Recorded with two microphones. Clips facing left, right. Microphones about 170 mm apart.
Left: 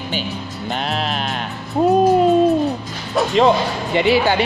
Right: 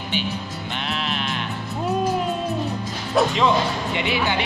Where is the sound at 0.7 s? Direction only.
40° left (ahead or behind).